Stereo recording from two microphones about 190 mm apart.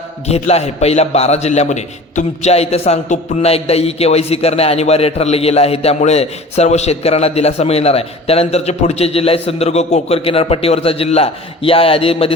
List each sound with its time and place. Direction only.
0.3 s a man's voice: 35° left (ahead or behind)